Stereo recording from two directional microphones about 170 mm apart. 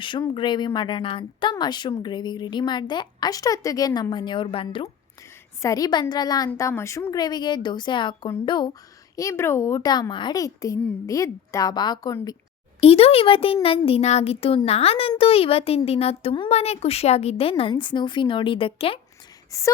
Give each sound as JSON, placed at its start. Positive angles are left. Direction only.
{"t": 0.0, "sound": "speech", "side_deg": 30}
{"t": 12.8, "sound": "speech", "side_deg": 35}
{"t": 19.5, "sound": "speech", "side_deg": 20}